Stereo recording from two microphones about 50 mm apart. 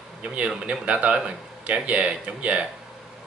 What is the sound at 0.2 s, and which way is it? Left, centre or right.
Speech, right.